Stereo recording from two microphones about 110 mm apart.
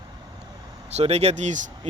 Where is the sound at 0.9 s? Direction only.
75° right (ahead or behind).